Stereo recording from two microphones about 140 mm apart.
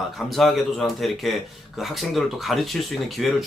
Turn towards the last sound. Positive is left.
turn(degrees=0)  # may be behind; listen again after turning